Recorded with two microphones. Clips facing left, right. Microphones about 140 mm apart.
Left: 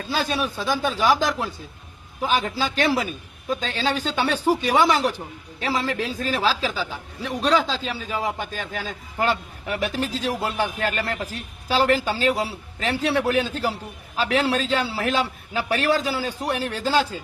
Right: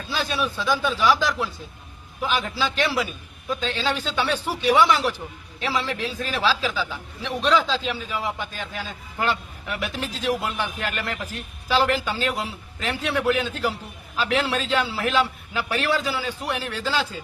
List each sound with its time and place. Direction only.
0.1 s a man's voice: 45° left (ahead or behind)